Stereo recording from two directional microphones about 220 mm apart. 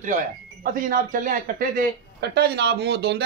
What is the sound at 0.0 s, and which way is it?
Speech, 35° right (ahead or behind).